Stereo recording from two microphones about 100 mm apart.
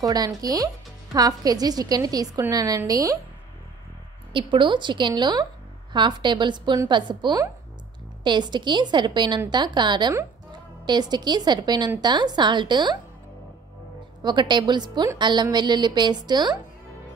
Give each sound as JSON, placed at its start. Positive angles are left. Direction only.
{"t": 0.0, "sound": "a woman's voice", "side_deg": -40}
{"t": 4.3, "sound": "a woman's voice", "side_deg": -55}
{"t": 14.2, "sound": "a woman's voice", "side_deg": -50}